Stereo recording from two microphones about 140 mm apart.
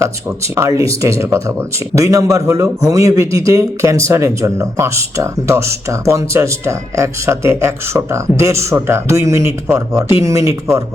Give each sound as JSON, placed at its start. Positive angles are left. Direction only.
{"t": 0.0, "sound": "speech", "side_deg": -20}